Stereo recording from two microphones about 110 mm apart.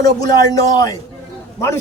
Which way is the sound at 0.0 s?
35° left (ahead or behind).